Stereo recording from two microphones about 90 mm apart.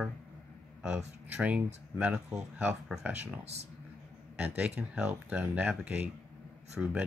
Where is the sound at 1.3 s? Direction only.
20° right (ahead or behind).